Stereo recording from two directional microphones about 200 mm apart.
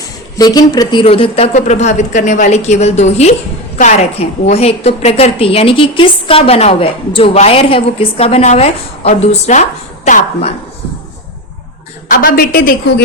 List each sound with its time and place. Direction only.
0.3 s a woman's voice: 20° left (ahead or behind)
12.0 s a woman's voice: 45° left (ahead or behind)